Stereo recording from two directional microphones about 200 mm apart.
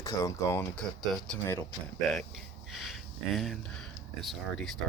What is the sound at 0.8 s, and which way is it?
Speech, 5° left (ahead or behind).